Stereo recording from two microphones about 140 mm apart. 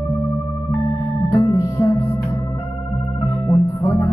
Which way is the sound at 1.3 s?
25° left (ahead or behind).